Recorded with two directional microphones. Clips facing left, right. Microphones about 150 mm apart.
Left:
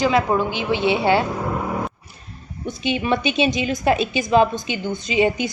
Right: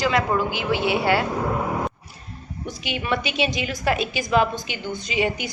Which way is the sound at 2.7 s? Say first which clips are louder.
Left 5 dB; 20° left (ahead or behind).